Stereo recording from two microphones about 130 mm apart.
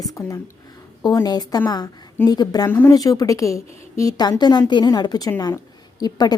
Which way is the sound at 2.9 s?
30° left (ahead or behind).